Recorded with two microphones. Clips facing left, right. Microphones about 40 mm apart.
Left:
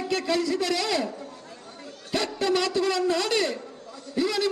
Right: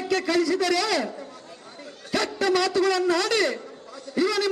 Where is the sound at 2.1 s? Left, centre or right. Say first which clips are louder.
Right 2 dB; left.